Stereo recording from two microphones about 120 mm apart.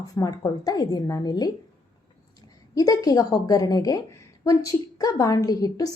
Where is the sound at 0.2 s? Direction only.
30° left (ahead or behind).